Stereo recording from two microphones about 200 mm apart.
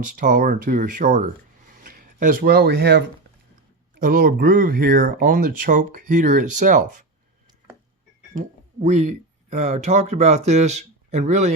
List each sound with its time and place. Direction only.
0.0 s speech: 40° right (ahead or behind)
1.6 s a sound: 40° right (ahead or behind)
3.9 s speech: 45° right (ahead or behind)
8.8 s speech: 35° right (ahead or behind)